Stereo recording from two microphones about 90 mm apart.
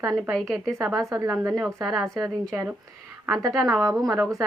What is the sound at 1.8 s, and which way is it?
Speech, centre (ahead or behind).